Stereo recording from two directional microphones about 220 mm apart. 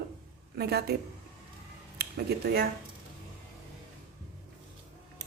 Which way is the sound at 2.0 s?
45° right (ahead or behind).